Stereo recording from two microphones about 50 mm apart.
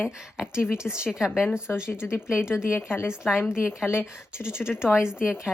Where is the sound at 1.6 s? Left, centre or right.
Left.